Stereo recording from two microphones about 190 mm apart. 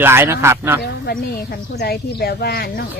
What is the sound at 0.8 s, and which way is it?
Speech, 55° left (ahead or behind).